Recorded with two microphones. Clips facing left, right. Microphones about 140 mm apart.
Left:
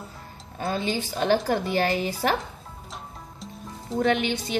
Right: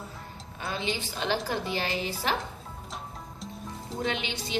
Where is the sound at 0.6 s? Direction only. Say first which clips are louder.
Left 5 dB; 45° left (ahead or behind).